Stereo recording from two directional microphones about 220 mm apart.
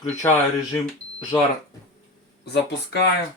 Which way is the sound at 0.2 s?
10° left (ahead or behind).